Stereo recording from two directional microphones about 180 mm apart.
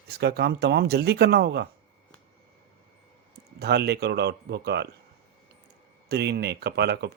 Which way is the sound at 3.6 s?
65° right (ahead or behind).